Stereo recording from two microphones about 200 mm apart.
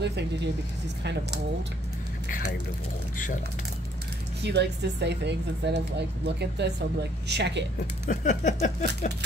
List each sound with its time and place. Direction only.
0.0 s speech: 55° right (ahead or behind)
4.4 s speech: 60° right (ahead or behind)
8.1 s a sound: 35° left (ahead or behind)